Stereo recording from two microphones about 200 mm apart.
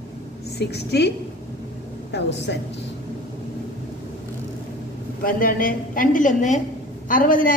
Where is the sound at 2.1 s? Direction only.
60° left (ahead or behind).